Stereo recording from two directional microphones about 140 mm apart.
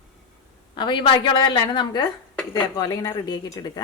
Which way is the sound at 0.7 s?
35° left (ahead or behind).